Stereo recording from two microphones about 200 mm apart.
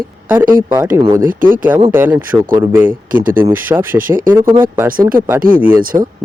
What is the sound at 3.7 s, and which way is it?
Speech, 15° right (ahead or behind).